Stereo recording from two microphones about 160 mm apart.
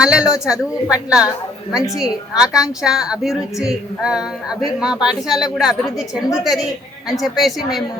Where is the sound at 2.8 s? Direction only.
5° right (ahead or behind).